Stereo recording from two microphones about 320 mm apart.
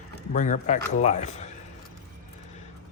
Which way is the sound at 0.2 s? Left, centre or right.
Left.